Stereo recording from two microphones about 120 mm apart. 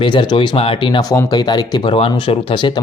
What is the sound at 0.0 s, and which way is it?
Speech, 40° left (ahead or behind).